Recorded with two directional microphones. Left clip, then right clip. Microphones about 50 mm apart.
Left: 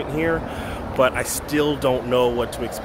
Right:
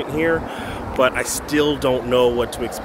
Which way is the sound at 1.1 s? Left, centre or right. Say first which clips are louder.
Right 2 dB; centre.